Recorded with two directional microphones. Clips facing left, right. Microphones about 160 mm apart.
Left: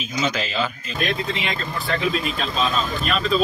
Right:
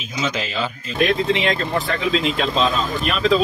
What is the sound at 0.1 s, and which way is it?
Speech, 25° right (ahead or behind).